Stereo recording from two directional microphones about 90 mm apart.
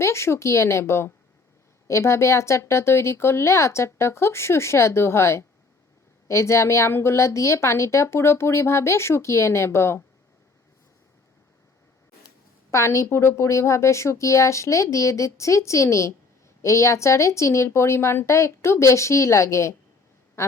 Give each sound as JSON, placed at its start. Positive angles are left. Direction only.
{"t": 0.0, "sound": "a woman's voice", "side_deg": 30}
{"t": 12.7, "sound": "a woman's voice", "side_deg": 35}